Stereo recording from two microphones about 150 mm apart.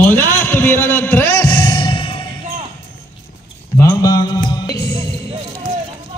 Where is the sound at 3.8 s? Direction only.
20° left (ahead or behind).